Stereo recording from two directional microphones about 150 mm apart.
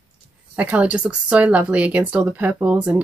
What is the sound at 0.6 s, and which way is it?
Speech, 10° right (ahead or behind).